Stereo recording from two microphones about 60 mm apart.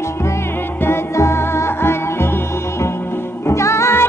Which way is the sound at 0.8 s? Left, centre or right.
Left.